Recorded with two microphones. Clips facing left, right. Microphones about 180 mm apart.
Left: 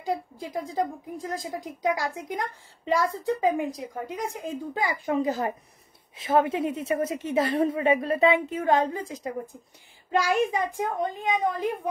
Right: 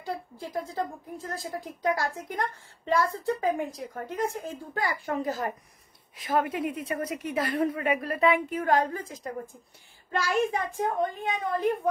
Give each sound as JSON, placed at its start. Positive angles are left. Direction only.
{"t": 0.1, "sound": "a woman's voice", "side_deg": 10}
{"t": 10.1, "sound": "a woman's voice", "side_deg": 15}
{"t": 11.5, "sound": "a woman's voice", "side_deg": -55}